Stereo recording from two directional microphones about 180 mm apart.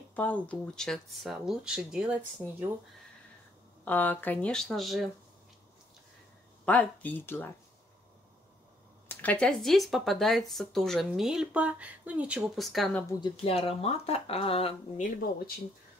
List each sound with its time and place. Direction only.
0.1 s speech: 10° left (ahead or behind); by 2.7 s 10° right (ahead or behind)
3.8 s speech: 10° left (ahead or behind)
6.6 s speech: 10° left (ahead or behind)
9.1 s speech: 10° left (ahead or behind)
13.2 s speech: 35° left (ahead or behind)
15.1 s speech: 55° left (ahead or behind)